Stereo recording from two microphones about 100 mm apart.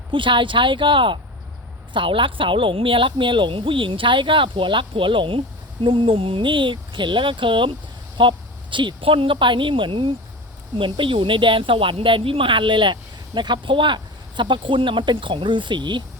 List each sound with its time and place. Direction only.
0.1 s speech: 55° right (ahead or behind)